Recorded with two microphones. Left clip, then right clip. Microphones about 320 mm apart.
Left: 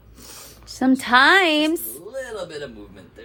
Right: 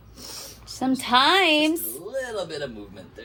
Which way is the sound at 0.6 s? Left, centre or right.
Left.